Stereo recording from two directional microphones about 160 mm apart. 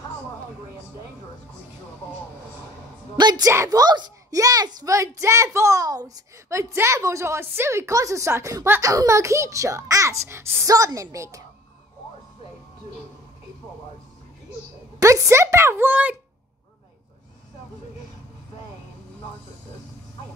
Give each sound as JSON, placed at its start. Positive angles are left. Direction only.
{"t": 3.2, "sound": "a child's voice", "side_deg": -25}
{"t": 15.0, "sound": "a woman's voice", "side_deg": -20}